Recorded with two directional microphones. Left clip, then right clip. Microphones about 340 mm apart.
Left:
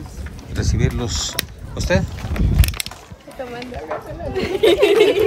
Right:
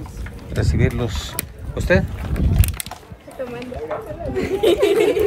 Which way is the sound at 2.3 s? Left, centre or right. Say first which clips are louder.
Left 3 dB; centre.